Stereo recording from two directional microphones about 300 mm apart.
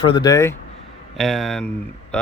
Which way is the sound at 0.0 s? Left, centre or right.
Centre.